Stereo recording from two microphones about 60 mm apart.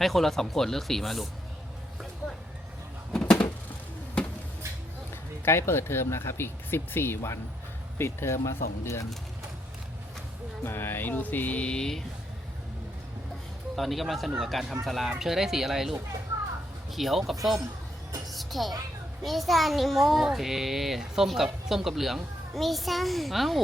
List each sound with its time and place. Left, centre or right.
0.0 s a child's voice: centre
3.1 s a sound: centre
5.5 s speech: left
10.6 s music: left; by 12.0 s centre
13.7 s a child's voice: centre
18.3 s music: centre
19.2 s a child's voice: centre